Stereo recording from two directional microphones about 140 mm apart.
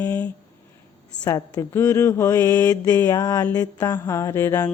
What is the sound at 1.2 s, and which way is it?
Mantra, 30° left (ahead or behind).